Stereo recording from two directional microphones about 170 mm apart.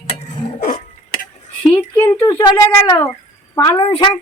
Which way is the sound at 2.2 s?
25° left (ahead or behind).